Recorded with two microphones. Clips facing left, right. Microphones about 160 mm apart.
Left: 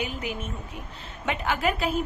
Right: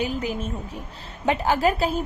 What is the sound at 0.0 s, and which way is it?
A woman's voice, 35° right (ahead or behind).